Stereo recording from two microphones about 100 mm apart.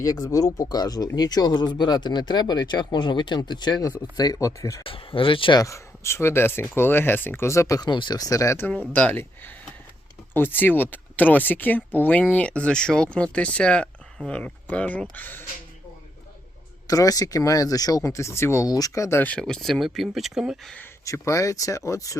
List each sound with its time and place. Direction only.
0.0 s speech: 35° left (ahead or behind)
4.8 s speech: 65° left (ahead or behind)
5.5 s speech: 30° left (ahead or behind)
7.8 s speech: 50° left (ahead or behind)
8.5 s speech: 20° left (ahead or behind)
16.8 s speech: 35° left (ahead or behind)
19.2 s speech: 10° left (ahead or behind); by 20.6 s 5° right (ahead or behind)
21.0 s speech: 30° left (ahead or behind)